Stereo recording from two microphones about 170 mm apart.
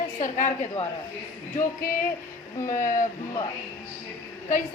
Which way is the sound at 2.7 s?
50° left (ahead or behind).